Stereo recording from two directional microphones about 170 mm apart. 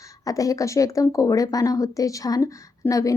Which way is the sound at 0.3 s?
20° left (ahead or behind).